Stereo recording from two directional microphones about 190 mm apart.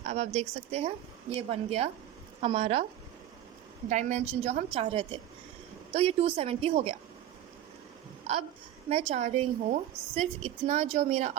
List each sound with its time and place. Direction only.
0.0 s a woman's voice: 35° right (ahead or behind)
3.8 s a woman's voice: 40° right (ahead or behind)
8.3 s a woman's voice: 35° right (ahead or behind)